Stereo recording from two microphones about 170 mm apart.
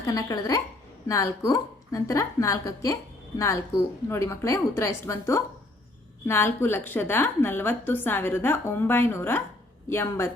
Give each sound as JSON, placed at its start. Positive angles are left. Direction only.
{"t": 0.1, "sound": "a woman's voice", "side_deg": 20}